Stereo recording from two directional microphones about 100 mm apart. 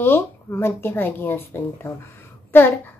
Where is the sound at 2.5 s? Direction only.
20° left (ahead or behind).